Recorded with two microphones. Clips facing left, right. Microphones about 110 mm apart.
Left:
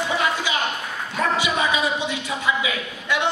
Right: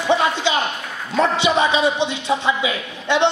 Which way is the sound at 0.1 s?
25° right (ahead or behind).